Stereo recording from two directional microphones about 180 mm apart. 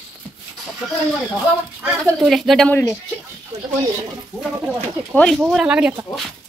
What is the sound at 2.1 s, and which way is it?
Speech, centre (ahead or behind).